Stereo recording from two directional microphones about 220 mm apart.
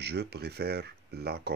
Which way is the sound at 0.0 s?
50° right (ahead or behind).